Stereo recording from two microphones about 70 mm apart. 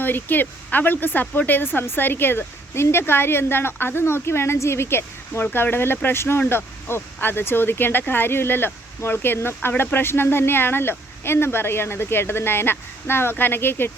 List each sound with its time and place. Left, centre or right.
0.0 s speech: left